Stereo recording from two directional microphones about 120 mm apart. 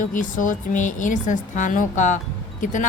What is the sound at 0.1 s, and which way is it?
Speech, 90° left.